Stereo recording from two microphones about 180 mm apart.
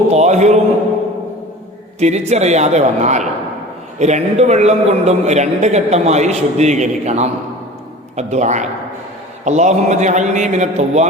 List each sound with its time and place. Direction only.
0.1 s a man's voice: 40° right (ahead or behind)
2.0 s a man's voice: 40° right (ahead or behind)